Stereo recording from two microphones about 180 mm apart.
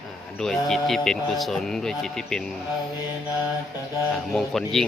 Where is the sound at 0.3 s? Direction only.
5° left (ahead or behind).